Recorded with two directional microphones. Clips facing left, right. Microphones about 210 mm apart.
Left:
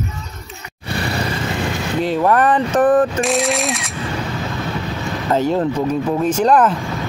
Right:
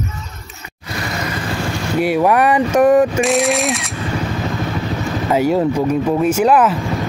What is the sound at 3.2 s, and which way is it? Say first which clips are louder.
Speech: right 3 dB; centre (ahead or behind).